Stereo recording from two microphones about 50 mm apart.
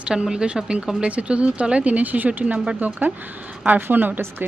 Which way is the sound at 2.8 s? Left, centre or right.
Right.